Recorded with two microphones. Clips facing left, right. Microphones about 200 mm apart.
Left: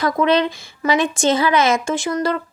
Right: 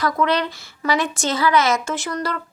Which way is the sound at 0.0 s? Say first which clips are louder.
Left 4 dB; 20° left (ahead or behind).